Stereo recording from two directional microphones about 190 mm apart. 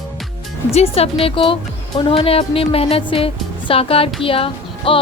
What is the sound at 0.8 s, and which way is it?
A woman's voice, 30° left (ahead or behind).